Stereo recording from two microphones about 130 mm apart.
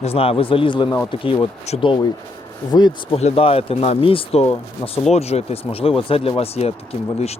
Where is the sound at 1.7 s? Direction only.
55° left (ahead or behind).